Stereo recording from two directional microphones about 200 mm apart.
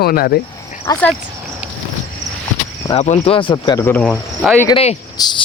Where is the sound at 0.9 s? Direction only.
20° left (ahead or behind).